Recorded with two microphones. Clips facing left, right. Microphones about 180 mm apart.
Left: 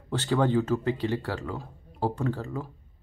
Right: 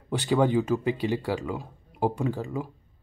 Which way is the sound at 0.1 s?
15° right (ahead or behind).